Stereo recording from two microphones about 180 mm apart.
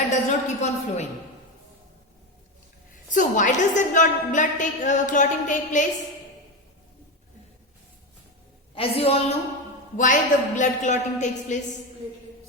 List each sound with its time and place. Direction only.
0.1 s a sound: 40° left (ahead or behind)
3.1 s a woman's voice: 45° left (ahead or behind)
8.7 s a woman's voice: 30° left (ahead or behind)
10.0 s a woman's voice: 45° left (ahead or behind)